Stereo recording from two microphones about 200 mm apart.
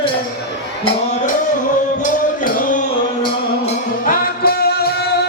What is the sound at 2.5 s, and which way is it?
Music, 40° left (ahead or behind).